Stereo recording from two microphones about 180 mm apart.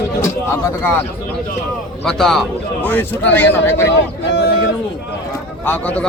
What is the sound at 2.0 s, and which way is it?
A man's voice, centre (ahead or behind).